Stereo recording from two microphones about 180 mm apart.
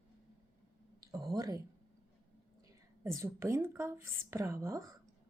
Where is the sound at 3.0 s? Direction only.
15° right (ahead or behind).